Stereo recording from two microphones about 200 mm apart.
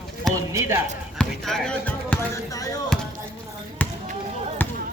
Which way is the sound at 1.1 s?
5° left (ahead or behind).